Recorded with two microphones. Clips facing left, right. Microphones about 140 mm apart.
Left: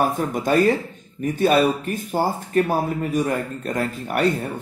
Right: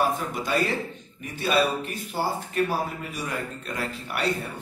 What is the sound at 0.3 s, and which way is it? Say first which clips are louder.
A man's voice: left 8 dB; 45° left (ahead or behind).